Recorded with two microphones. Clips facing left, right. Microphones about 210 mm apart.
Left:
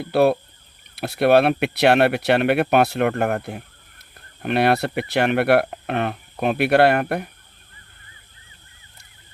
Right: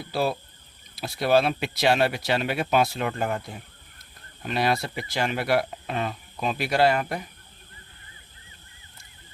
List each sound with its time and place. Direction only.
0.0 s speech: 60° left (ahead or behind)